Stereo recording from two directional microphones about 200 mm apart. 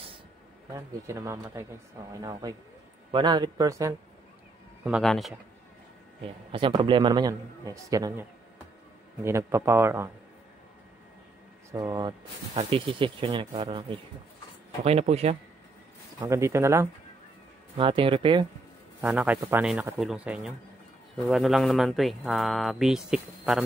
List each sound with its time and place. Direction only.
0.7 s speech: 15° right (ahead or behind)
3.1 s a man's voice: 20° right (ahead or behind)
4.8 s speech: centre (ahead or behind)
6.5 s a man's voice: 25° right (ahead or behind)
11.7 s a man's voice: 20° right (ahead or behind)
16.2 s speech: 15° right (ahead or behind)
17.7 s a man's voice: 25° right (ahead or behind)
18.9 s speech: 10° right (ahead or behind)